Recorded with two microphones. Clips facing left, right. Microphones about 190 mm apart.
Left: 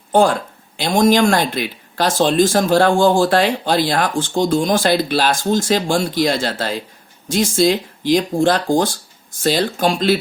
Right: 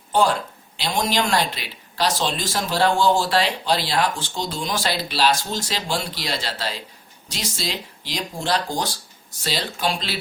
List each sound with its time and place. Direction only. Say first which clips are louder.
0.1 s speech: left 6 dB; 50° left (ahead or behind)